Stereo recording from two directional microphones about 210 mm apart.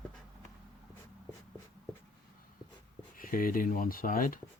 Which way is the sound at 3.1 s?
40° left (ahead or behind).